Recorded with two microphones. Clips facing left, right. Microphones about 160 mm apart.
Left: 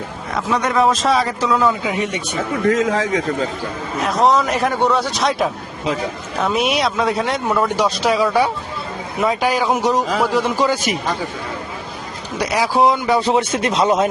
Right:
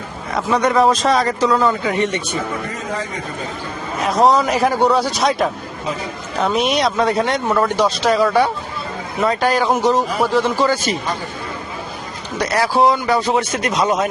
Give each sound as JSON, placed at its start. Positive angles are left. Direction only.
{"t": 0.3, "sound": "a man's voice", "side_deg": 0}
{"t": 2.6, "sound": "a man's voice", "side_deg": 90}
{"t": 4.0, "sound": "a man's voice", "side_deg": 0}
{"t": 10.3, "sound": "speech", "side_deg": 15}
{"t": 12.4, "sound": "speech", "side_deg": 10}